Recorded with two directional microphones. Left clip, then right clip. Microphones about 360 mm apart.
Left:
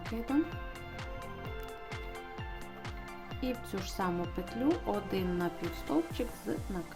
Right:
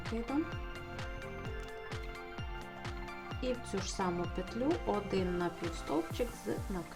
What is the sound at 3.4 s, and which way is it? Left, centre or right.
Speech, centre.